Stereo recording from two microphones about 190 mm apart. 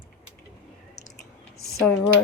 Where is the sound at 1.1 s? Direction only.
75° left (ahead or behind).